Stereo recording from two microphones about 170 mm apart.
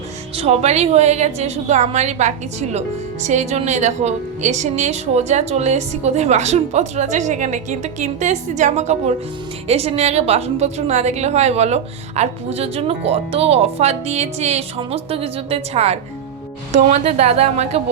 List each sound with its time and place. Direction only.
0.3 s a woman's voice: 40° right (ahead or behind)